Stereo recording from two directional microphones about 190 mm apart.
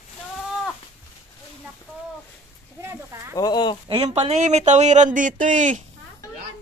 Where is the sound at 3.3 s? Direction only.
20° left (ahead or behind).